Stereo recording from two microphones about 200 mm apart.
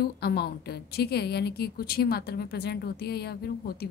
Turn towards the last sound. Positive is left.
turn(degrees=50)  # may be behind; listen again after turning